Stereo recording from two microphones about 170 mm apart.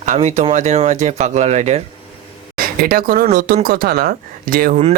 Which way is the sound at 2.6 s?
55° right (ahead or behind).